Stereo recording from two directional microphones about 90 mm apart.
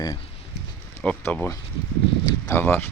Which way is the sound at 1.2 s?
25° left (ahead or behind).